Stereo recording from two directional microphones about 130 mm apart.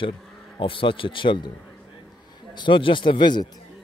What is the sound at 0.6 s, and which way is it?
Speech, 40° left (ahead or behind).